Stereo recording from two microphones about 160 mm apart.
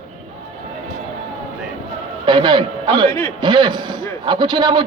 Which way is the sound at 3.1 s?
15° left (ahead or behind).